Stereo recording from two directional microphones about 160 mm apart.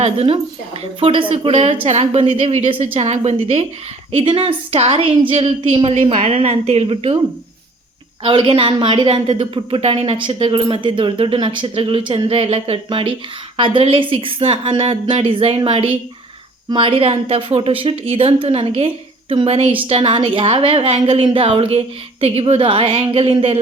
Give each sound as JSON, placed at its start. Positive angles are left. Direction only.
{"t": 0.0, "sound": "a woman's voice", "side_deg": -35}
{"t": 8.2, "sound": "speech", "side_deg": -30}